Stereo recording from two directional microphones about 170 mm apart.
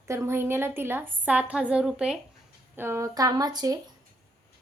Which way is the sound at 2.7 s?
15° right (ahead or behind).